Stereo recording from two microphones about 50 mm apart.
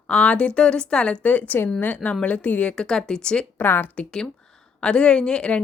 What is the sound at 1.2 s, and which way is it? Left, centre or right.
A woman's voice, left.